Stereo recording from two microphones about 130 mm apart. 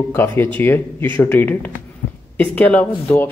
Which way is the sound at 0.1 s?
15° left (ahead or behind).